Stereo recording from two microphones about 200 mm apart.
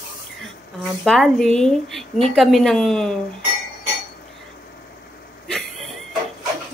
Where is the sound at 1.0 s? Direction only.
Centre (ahead or behind).